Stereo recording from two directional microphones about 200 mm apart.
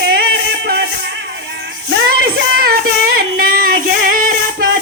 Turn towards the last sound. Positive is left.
turn(degrees=-45)  # may be behind; listen again after turning